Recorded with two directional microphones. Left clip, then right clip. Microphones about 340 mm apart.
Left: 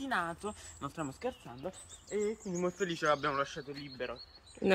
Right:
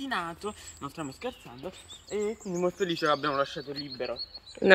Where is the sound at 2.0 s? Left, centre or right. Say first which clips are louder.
Right 3 dB; centre.